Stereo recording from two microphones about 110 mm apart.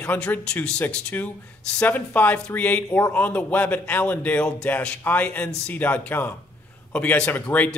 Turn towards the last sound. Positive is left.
turn(degrees=15)  # may be behind; listen again after turning